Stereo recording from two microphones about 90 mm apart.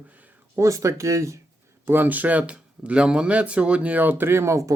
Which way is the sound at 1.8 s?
20° right (ahead or behind).